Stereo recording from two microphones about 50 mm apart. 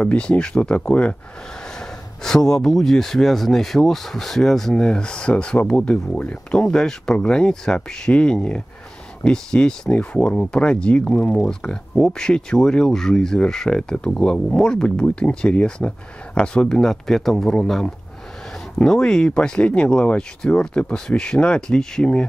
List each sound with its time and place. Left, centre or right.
0.0 s speech: left
6.6 s speech: centre